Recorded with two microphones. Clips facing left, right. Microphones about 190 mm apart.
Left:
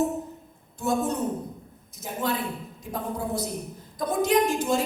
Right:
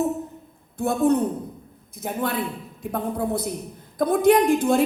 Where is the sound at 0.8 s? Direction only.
55° right (ahead or behind).